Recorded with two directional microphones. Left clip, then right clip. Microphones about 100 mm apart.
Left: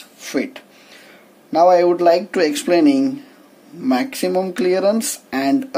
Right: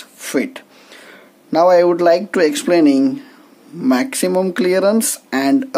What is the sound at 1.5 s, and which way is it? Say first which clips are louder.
Speech: right 1 dB; 65° right (ahead or behind).